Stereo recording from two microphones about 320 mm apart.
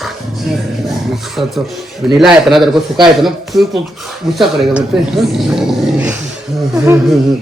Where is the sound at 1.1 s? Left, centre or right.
Centre.